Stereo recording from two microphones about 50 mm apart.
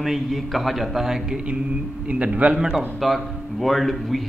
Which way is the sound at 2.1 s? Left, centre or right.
Right.